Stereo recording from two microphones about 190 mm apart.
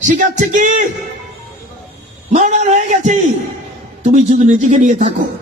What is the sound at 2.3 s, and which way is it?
A man's voice, 35° right (ahead or behind).